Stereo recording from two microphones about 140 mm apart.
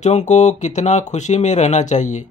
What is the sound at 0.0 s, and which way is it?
Speech, 55° left (ahead or behind).